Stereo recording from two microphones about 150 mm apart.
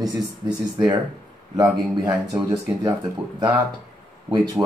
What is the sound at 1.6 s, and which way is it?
Speech, 25° right (ahead or behind).